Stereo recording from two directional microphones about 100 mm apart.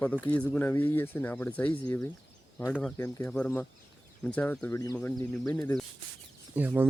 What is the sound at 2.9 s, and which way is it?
Speech, 25° left (ahead or behind).